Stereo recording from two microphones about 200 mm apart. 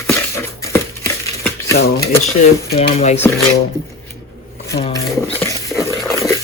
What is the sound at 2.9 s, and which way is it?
Speech, 30° left (ahead or behind).